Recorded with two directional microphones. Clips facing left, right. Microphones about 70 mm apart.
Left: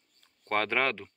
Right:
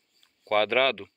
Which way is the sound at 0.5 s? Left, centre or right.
Centre.